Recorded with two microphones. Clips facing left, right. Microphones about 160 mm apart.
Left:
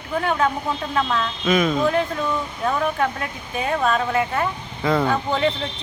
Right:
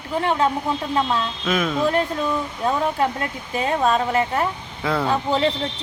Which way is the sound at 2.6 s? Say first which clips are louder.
Right 1 dB; 20° right (ahead or behind).